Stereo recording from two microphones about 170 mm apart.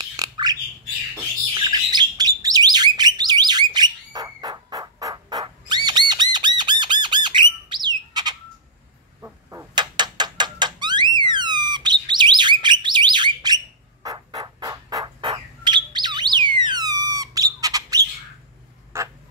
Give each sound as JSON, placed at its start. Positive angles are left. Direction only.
{"t": 0.1, "sound": "squawk", "side_deg": -20}
{"t": 1.1, "sound": "bird", "side_deg": -20}
{"t": 9.2, "sound": "a sound", "side_deg": -15}
{"t": 14.0, "sound": "bird", "side_deg": -25}
{"t": 18.9, "sound": "fowl", "side_deg": -15}